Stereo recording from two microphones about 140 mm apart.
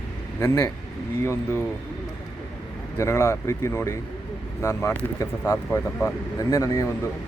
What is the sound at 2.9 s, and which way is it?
Speech, 20° left (ahead or behind).